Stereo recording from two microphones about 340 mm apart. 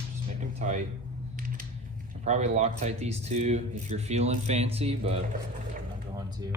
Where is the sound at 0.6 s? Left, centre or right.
Right.